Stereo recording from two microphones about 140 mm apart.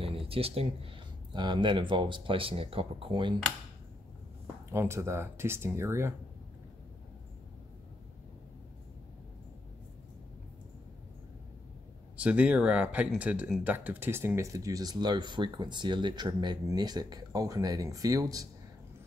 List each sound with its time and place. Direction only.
0.0 s speech: 40° right (ahead or behind)
4.6 s speech: 20° right (ahead or behind)
12.2 s speech: 10° right (ahead or behind); by 18.5 s 25° right (ahead or behind)